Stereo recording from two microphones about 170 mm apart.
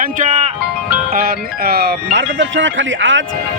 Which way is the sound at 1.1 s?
60° right (ahead or behind).